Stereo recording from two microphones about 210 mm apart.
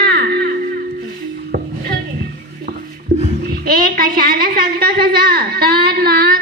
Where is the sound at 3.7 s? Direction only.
45° right (ahead or behind).